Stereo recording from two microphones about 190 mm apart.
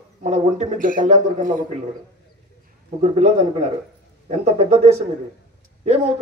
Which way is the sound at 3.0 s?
35° right (ahead or behind).